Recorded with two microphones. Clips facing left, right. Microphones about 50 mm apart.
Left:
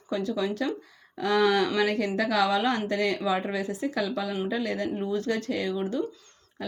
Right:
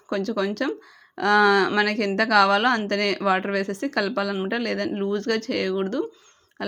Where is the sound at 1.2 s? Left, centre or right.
Right.